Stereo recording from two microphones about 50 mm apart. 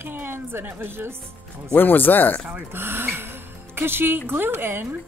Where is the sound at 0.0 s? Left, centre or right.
Right.